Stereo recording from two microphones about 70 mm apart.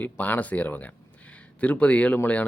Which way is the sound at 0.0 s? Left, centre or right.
Left.